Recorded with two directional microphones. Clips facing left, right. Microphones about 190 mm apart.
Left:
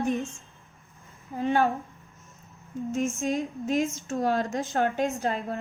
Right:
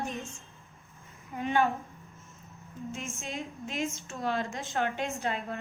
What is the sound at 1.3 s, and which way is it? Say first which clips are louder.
Speech: left 3 dB; 35° left (ahead or behind).